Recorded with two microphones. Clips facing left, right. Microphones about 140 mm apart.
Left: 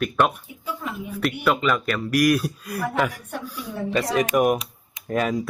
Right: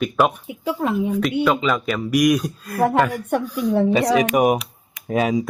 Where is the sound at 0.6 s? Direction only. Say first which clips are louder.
Right 10 dB; 65° right (ahead or behind).